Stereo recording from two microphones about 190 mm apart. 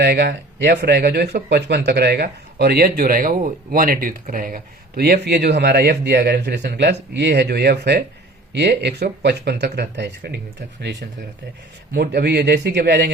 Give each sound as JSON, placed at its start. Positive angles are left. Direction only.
{"t": 0.0, "sound": "speech", "side_deg": -60}
{"t": 11.9, "sound": "speech", "side_deg": -60}